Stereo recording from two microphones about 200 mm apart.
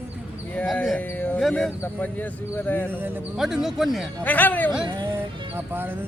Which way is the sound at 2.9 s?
10° right (ahead or behind).